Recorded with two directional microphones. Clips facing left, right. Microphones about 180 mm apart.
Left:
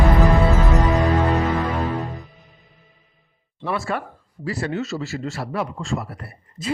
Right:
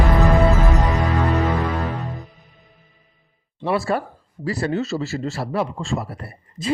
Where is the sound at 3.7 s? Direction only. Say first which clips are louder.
Right 5 dB; 35° right (ahead or behind).